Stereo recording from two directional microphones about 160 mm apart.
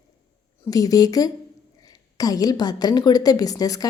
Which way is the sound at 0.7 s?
25° left (ahead or behind).